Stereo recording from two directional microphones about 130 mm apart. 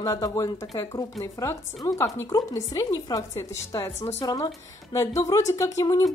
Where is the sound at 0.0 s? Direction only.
25° left (ahead or behind).